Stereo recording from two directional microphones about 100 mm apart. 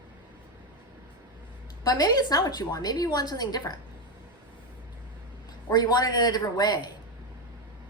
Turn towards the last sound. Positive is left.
turn(degrees=40)  # may be behind; listen again after turning